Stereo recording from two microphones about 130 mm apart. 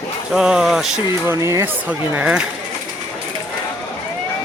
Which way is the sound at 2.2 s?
10° right (ahead or behind).